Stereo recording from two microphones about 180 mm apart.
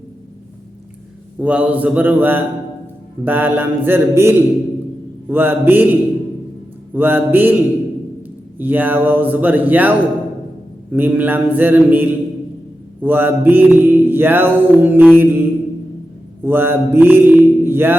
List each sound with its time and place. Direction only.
1.4 s mantra: 5° right (ahead or behind)
10.9 s mantra: 10° right (ahead or behind)
16.4 s music: 10° right (ahead or behind)